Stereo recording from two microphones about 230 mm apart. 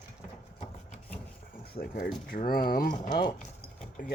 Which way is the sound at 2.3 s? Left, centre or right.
Left.